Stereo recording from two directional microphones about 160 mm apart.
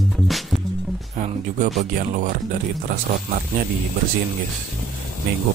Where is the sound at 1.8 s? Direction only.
55° right (ahead or behind).